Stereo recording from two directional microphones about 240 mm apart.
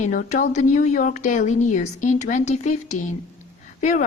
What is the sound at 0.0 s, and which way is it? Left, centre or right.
A woman's voice, left.